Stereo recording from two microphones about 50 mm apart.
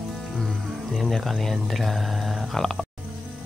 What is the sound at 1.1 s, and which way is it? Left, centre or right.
Speech, centre.